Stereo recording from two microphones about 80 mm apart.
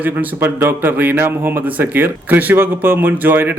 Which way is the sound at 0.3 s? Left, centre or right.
Right.